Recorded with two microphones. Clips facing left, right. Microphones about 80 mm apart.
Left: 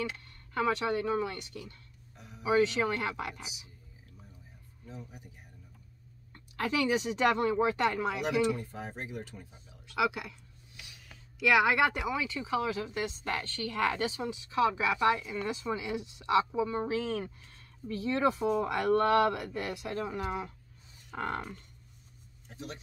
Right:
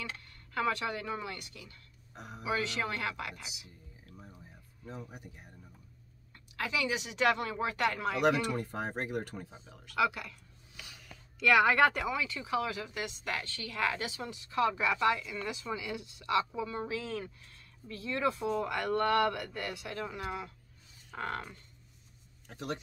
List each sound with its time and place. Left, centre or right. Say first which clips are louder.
0.6 s speech: left 3 dB; left
2.1 s a sound: right 6 dB; right
2.4 s speech: left 7 dB; left
4.8 s speech: right 2 dB; right
6.3 s speech: left 4 dB; left; by 8.2 s centre
8.2 s speech: right 3 dB; right
9.9 s speech: even; centre
11.3 s speech: even; centre; by 14.2 s left
14.2 s speech: left 1 dB; centre
15.0 s speech: left 2 dB; left
22.5 s speech: right 5 dB; right